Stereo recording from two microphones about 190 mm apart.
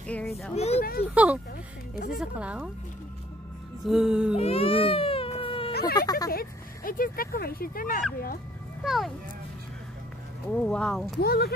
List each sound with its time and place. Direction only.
0.0 s speech: 5° left (ahead or behind)
0.6 s speech: 35° left (ahead or behind)
1.1 s speech: 5° right (ahead or behind)
3.8 s speech: centre (ahead or behind)
4.4 s cat: 30° left (ahead or behind)
5.7 s a sound: 55° left (ahead or behind)
5.9 s speech: 20° left (ahead or behind)
6.3 s speech: 50° left (ahead or behind)
8.8 s speech: centre (ahead or behind)
10.5 s speech: 5° left (ahead or behind)
11.1 s speech: 55° left (ahead or behind)